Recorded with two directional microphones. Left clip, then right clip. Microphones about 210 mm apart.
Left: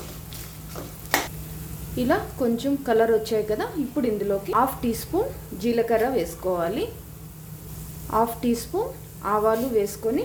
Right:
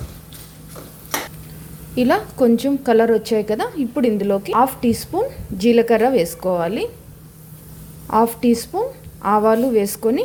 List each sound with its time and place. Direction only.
2.0 s a woman's voice: 35° right (ahead or behind)
8.1 s a woman's voice: 30° right (ahead or behind)